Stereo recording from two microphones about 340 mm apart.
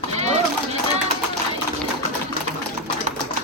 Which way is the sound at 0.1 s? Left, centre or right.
Centre.